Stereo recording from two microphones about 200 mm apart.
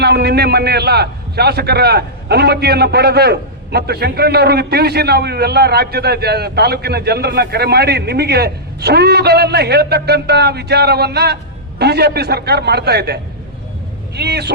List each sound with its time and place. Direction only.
0.0 s a man's voice: 55° right (ahead or behind)
14.2 s speech: 55° right (ahead or behind)